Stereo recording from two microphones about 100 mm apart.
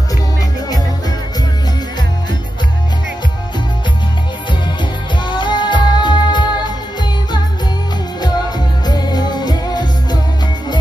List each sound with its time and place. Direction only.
5.2 s music: 50° left (ahead or behind)
8.8 s music: 45° left (ahead or behind)